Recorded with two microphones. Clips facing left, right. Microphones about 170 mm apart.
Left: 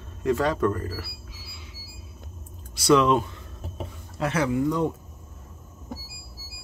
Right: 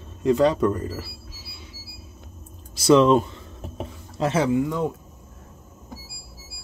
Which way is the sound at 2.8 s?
30° right (ahead or behind).